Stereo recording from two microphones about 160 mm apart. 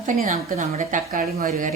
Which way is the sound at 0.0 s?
55° right (ahead or behind).